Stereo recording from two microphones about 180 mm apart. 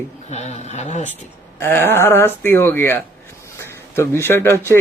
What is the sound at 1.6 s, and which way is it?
A man's voice, 15° left (ahead or behind).